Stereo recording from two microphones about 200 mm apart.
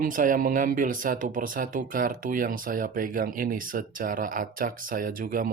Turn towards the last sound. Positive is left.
turn(degrees=-45)  # may be behind; listen again after turning